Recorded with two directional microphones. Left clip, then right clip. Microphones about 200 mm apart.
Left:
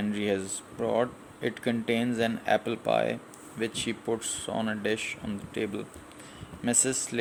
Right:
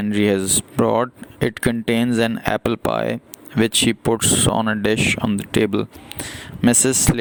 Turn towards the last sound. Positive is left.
turn(degrees=-55)  # may be behind; listen again after turning